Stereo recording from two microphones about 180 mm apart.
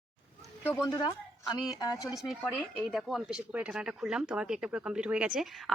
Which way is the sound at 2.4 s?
10° left (ahead or behind).